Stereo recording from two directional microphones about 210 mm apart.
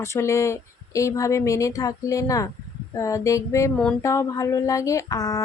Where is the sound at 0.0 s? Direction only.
15° left (ahead or behind).